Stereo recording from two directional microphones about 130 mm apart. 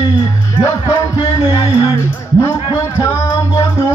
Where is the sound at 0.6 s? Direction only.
30° left (ahead or behind).